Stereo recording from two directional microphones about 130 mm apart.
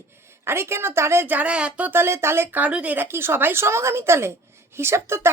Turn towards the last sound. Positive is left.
turn(degrees=-20)  # may be behind; listen again after turning